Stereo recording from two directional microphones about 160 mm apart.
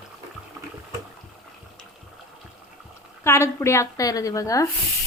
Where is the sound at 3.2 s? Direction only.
15° left (ahead or behind).